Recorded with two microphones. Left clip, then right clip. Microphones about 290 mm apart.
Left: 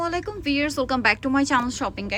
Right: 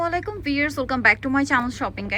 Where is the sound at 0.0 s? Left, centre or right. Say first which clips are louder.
Right 2 dB; centre.